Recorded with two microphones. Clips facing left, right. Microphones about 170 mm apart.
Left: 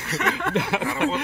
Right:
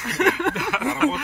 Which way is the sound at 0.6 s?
25° left (ahead or behind).